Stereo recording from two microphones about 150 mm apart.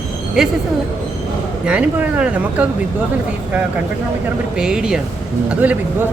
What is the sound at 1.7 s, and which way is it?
Speech, 10° right (ahead or behind).